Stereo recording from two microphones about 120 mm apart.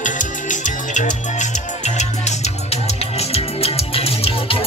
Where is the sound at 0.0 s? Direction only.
90° left.